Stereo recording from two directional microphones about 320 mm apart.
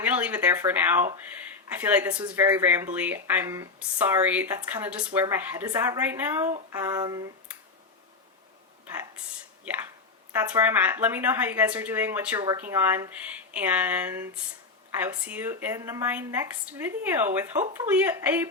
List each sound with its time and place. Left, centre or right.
0.0 s speech: centre
10.3 s speech: centre